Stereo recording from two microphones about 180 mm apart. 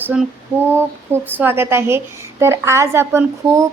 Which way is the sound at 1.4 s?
10° right (ahead or behind).